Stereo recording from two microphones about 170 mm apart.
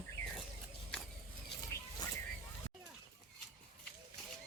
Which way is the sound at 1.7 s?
15° left (ahead or behind).